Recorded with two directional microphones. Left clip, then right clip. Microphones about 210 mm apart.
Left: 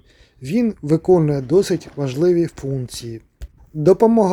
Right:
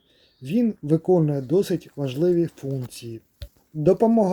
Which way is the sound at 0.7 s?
15° left (ahead or behind).